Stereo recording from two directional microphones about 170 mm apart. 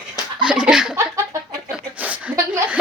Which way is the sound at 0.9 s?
20° right (ahead or behind).